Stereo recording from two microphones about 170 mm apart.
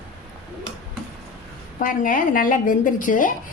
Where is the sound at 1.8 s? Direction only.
55° left (ahead or behind).